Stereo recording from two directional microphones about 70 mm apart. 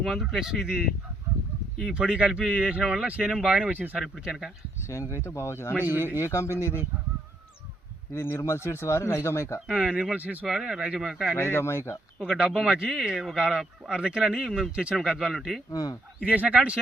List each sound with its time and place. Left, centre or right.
0.0 s speech: centre
1.8 s speech: centre
3.7 s speech: right
4.2 s speech: centre
4.9 s speech: left
8.1 s speech: left
9.6 s speech: centre
10.2 s speech: right
10.4 s speech: centre
11.3 s speech: left
12.2 s speech: centre
15.7 s speech: left
16.2 s speech: right